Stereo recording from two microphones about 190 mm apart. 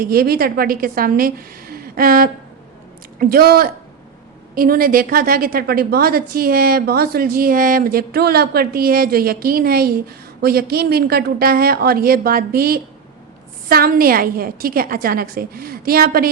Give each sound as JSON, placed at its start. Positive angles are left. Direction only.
{"t": 0.0, "sound": "a woman's voice", "side_deg": -50}